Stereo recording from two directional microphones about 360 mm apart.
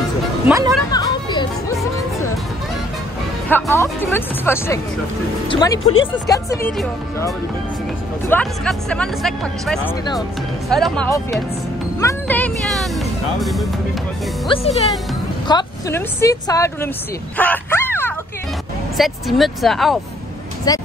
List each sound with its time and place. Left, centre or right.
0.5 s speech: centre
0.9 s music: centre
3.4 s speech: centre
14.5 s speech: centre
17.4 s bow-wow: centre
18.9 s speech: centre
20.7 s speech: centre